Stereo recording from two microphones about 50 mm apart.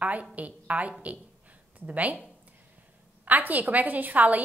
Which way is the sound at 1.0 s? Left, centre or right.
Right.